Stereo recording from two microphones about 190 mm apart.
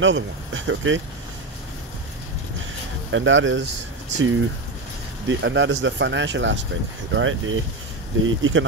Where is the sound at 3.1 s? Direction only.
80° right.